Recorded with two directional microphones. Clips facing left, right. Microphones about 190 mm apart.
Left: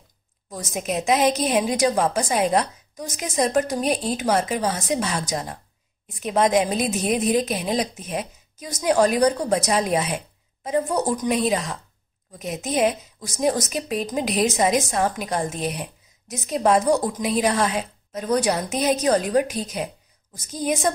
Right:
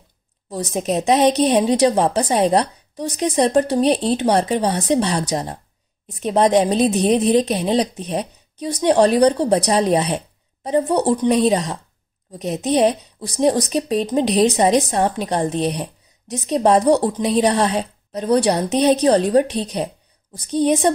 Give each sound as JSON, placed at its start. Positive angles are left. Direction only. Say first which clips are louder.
{"t": 0.5, "sound": "a woman's voice", "louder": "right 6 dB", "side_deg": -35}